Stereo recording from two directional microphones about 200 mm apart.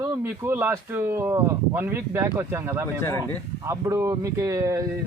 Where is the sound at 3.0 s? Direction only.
10° left (ahead or behind).